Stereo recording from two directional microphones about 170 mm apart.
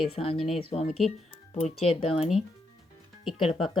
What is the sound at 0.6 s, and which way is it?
Speech, 35° left (ahead or behind).